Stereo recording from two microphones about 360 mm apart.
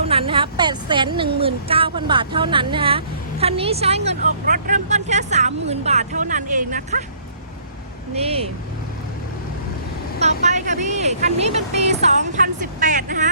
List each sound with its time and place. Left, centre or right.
0.0 s speech: centre
8.1 s speech: centre
10.2 s speech: centre